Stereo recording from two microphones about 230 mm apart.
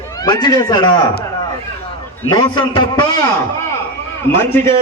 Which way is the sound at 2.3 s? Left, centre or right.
Centre.